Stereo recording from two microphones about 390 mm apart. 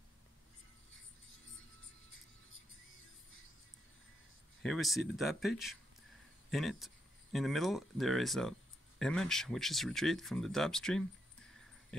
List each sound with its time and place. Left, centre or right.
1.3 s music: left
4.6 s speech: centre
6.5 s speech: centre